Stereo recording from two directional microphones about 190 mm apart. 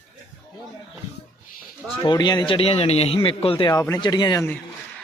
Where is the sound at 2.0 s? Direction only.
20° left (ahead or behind).